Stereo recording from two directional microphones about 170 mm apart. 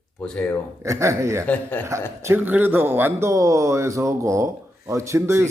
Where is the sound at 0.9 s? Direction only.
15° right (ahead or behind).